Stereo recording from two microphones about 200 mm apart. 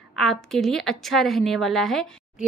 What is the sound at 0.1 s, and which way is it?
A woman's voice, centre (ahead or behind).